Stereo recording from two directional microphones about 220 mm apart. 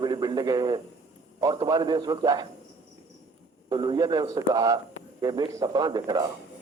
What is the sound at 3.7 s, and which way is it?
Speech, 20° right (ahead or behind).